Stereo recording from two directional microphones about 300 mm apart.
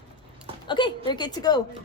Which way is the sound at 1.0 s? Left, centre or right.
Centre.